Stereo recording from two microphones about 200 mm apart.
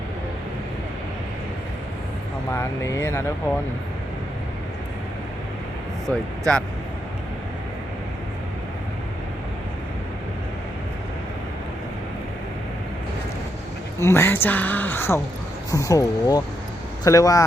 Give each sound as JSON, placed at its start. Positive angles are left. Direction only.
{"t": 2.5, "sound": "speech", "side_deg": 15}
{"t": 6.1, "sound": "speech", "side_deg": 5}
{"t": 14.0, "sound": "speech", "side_deg": 10}